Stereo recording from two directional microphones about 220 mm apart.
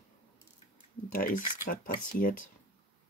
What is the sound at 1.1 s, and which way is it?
Speech, 40° left (ahead or behind).